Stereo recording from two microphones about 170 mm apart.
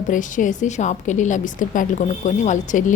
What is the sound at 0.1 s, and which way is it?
A woman's voice, 50° left (ahead or behind).